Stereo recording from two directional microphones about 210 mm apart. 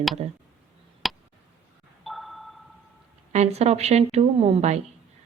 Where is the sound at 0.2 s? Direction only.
30° right (ahead or behind).